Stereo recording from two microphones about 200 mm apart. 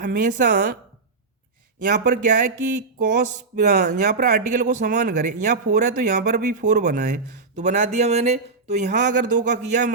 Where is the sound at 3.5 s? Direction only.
45° right (ahead or behind).